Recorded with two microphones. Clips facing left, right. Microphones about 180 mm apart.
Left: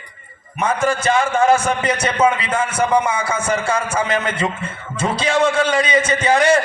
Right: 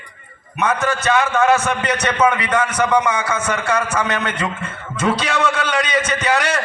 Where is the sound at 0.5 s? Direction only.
30° left (ahead or behind).